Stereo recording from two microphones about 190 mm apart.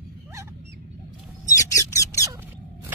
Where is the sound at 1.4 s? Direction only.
15° left (ahead or behind).